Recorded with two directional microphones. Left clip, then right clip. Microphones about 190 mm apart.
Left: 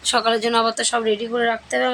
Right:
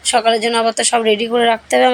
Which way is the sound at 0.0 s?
5° right (ahead or behind).